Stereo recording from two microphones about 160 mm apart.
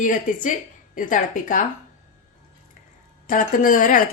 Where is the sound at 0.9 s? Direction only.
55° left (ahead or behind).